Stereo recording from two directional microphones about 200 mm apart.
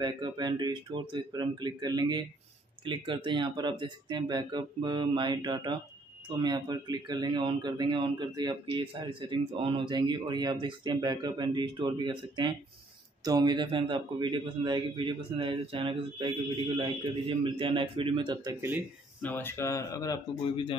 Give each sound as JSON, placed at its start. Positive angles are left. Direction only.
{"t": 0.0, "sound": "speech", "side_deg": -20}
{"t": 19.2, "sound": "speech", "side_deg": 10}